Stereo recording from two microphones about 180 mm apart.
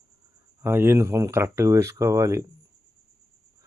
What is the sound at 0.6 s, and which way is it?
Speech, 15° right (ahead or behind).